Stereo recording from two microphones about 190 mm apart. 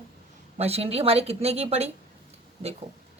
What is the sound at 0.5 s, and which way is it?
A woman's voice, 35° right (ahead or behind).